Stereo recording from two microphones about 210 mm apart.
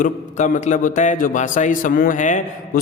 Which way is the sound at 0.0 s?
35° left (ahead or behind).